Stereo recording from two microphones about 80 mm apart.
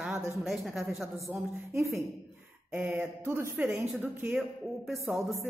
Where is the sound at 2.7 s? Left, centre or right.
Right.